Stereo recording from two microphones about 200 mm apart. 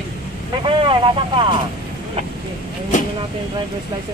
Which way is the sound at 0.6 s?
25° right (ahead or behind).